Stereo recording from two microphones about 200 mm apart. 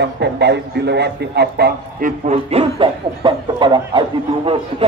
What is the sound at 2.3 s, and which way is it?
Speech, 25° right (ahead or behind).